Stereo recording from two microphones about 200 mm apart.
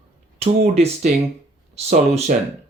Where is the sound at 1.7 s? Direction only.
35° right (ahead or behind).